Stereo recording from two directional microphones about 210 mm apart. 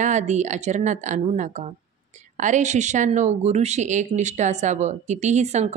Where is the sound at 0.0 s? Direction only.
35° right (ahead or behind).